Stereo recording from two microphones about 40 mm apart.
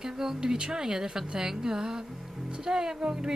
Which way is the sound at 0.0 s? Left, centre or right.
Centre.